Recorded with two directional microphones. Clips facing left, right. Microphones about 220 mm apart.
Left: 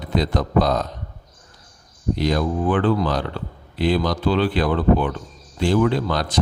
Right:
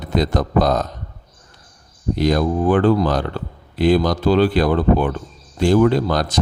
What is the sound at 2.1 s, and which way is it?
A man's voice, 45° right (ahead or behind).